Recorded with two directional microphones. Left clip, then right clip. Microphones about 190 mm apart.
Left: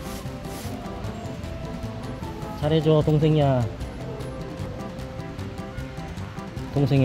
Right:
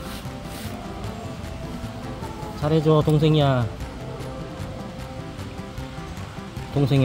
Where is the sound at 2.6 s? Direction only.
25° right (ahead or behind).